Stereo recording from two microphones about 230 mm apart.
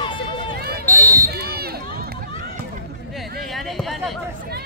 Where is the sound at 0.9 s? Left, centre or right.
Centre.